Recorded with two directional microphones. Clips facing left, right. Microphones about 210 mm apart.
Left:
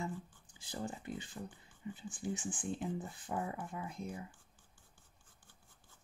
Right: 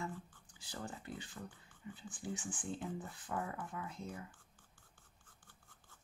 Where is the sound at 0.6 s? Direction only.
20° left (ahead or behind).